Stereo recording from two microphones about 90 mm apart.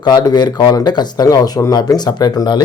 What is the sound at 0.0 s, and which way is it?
A man's voice, 50° left (ahead or behind).